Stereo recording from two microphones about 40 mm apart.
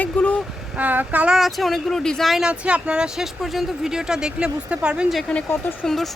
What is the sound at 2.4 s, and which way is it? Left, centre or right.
Speech, right.